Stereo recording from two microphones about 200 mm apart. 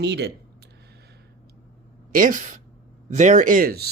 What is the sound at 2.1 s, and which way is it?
Speech, 40° right (ahead or behind).